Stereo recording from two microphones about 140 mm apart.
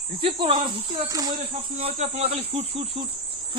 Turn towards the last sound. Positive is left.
turn(degrees=-45)  # may be behind; listen again after turning